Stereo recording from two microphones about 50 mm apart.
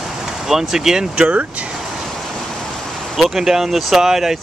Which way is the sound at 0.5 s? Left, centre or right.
Centre.